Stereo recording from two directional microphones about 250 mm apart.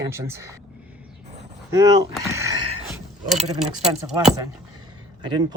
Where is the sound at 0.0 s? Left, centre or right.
Centre.